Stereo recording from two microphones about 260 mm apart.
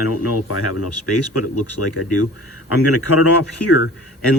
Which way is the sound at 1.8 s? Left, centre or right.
Left.